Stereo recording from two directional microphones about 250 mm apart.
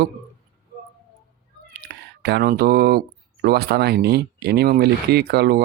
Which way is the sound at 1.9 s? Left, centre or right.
Right.